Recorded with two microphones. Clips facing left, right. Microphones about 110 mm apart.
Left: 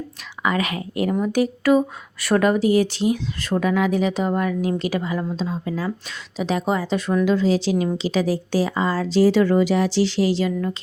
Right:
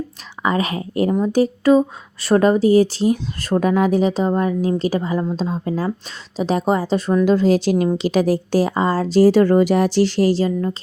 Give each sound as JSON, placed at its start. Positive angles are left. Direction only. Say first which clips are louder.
{"t": 0.4, "sound": "speech", "louder": "right 3 dB", "side_deg": -35}